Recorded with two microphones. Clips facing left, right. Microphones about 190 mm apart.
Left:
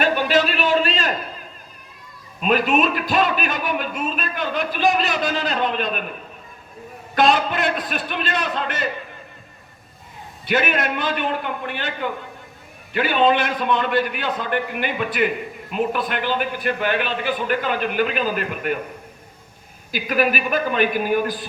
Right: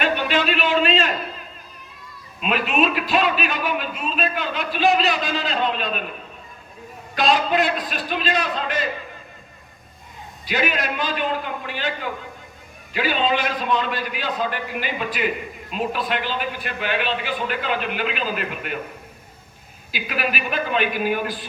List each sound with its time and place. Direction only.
0.0 s a sound: 40° left (ahead or behind)
2.4 s speech: 45° left (ahead or behind)
7.2 s a man's voice: 50° left (ahead or behind)
10.4 s a man's voice: 55° left (ahead or behind)
19.9 s speech: 45° left (ahead or behind)